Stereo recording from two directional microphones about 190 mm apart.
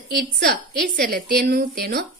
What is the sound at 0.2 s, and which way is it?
A woman's voice, 50° right (ahead or behind).